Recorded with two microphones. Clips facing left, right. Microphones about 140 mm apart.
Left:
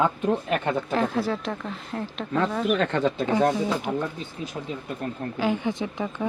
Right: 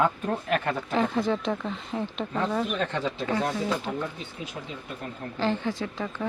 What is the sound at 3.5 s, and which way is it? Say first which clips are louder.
Speech: left 3 dB; 15° left (ahead or behind).